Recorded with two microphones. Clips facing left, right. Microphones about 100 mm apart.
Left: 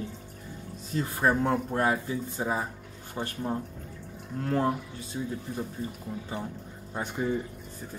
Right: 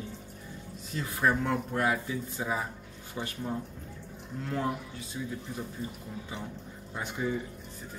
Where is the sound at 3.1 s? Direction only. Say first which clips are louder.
Left 3 dB; 45° left (ahead or behind).